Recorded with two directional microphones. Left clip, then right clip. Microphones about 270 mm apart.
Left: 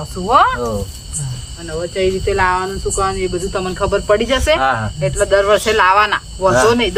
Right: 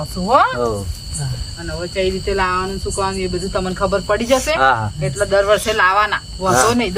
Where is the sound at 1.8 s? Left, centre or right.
Centre.